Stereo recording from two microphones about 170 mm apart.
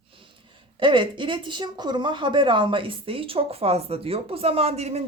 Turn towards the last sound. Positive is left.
turn(degrees=-40)  # may be behind; listen again after turning